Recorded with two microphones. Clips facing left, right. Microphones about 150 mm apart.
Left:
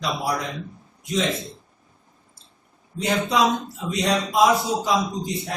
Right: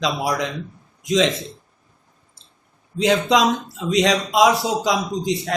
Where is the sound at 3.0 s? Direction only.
90° right.